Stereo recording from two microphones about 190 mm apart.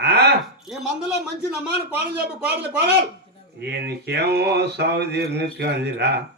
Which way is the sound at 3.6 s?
60° right (ahead or behind).